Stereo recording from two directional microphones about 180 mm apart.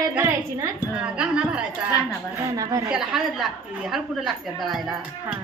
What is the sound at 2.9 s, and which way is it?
A woman's voice, centre (ahead or behind).